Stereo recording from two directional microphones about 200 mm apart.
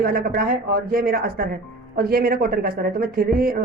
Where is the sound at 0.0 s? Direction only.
50° right (ahead or behind).